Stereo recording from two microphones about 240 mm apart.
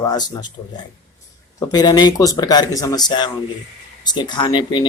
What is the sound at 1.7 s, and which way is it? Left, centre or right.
Speech, centre.